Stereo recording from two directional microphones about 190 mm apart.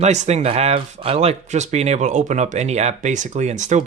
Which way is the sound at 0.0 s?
35° right (ahead or behind).